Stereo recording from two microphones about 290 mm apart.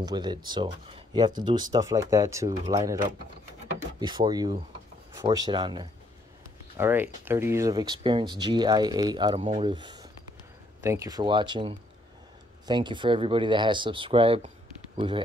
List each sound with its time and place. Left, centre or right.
0.0 s speech: centre